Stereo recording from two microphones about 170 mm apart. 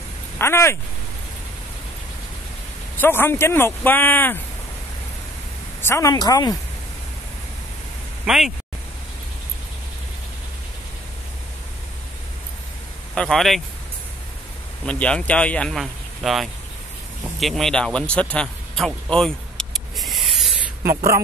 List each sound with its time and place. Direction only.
0.4 s speech: 15° left (ahead or behind)
3.0 s speech: 15° left (ahead or behind)
5.8 s a woman's voice: 15° left (ahead or behind)
8.3 s speech: centre (ahead or behind)
13.1 s speech: centre (ahead or behind)
14.9 s speech: 5° left (ahead or behind)
17.4 s a sound: centre (ahead or behind)